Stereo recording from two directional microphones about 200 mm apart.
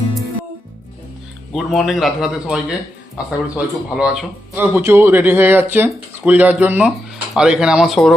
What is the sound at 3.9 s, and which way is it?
Speech, 5° right (ahead or behind).